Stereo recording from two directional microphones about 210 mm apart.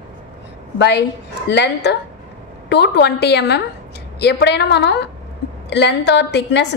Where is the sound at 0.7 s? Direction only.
55° left (ahead or behind).